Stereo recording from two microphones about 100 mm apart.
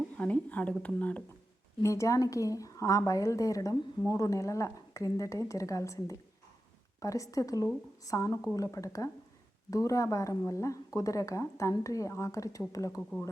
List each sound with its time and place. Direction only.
0.2 s speech: 15° left (ahead or behind)
1.8 s speech: 30° left (ahead or behind)
13.0 s speech: centre (ahead or behind)